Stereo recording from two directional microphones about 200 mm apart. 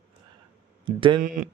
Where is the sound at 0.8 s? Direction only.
25° right (ahead or behind).